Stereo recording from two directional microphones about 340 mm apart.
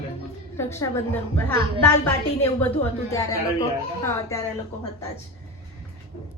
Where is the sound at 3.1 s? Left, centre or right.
Centre.